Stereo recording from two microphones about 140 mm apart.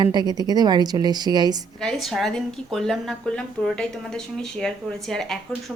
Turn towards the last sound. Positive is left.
turn(degrees=5)  # may be behind; listen again after turning